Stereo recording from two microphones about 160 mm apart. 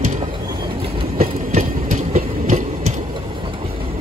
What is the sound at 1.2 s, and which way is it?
Train, 45° right (ahead or behind).